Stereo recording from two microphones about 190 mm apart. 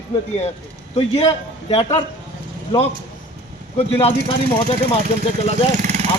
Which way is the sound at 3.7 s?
30° left (ahead or behind).